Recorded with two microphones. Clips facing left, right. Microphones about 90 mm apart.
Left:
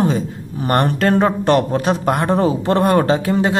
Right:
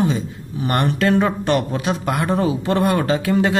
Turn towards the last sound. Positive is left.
turn(degrees=30)  # may be behind; listen again after turning